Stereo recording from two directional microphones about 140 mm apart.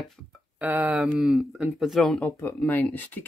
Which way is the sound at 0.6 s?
10° right (ahead or behind).